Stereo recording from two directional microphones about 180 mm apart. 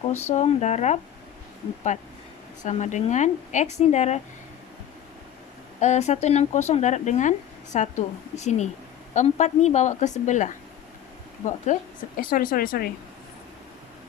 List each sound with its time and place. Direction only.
0.3 s speech: 40° left (ahead or behind)
5.8 s speech: 40° left (ahead or behind); by 12.9 s 55° left (ahead or behind)